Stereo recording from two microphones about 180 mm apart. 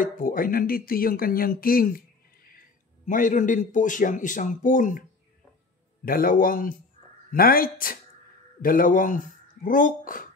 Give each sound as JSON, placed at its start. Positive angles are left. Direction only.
{"t": 0.0, "sound": "speech", "side_deg": 50}
{"t": 3.1, "sound": "speech", "side_deg": 45}
{"t": 6.0, "sound": "speech", "side_deg": 50}